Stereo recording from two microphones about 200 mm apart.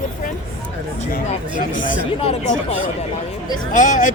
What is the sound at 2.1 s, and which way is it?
Speech, 30° left (ahead or behind).